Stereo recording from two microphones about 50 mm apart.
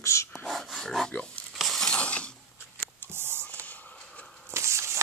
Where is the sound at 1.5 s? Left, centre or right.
Centre.